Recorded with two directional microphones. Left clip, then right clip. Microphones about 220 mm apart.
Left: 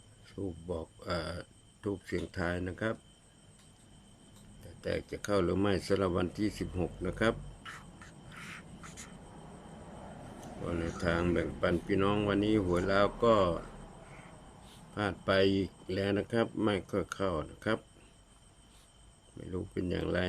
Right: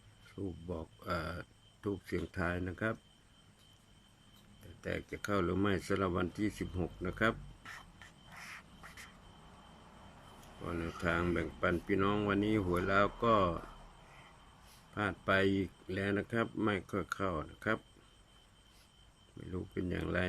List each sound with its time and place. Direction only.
0.4 s speech: centre (ahead or behind)
4.8 s speech: 5° left (ahead or behind)
7.6 s a sound: 20° right (ahead or behind)
10.8 s speech: centre (ahead or behind)
14.9 s speech: 5° left (ahead or behind)
19.4 s speech: 5° left (ahead or behind)